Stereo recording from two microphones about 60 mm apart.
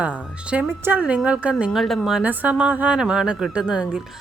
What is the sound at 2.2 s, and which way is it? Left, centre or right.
A woman's voice, right.